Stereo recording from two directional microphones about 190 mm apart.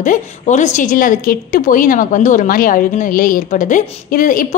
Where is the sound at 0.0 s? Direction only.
40° left (ahead or behind).